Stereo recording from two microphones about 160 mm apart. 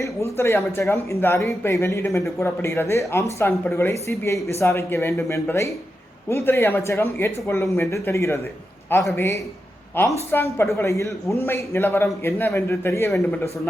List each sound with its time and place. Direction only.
0.0 s speech: 15° left (ahead or behind)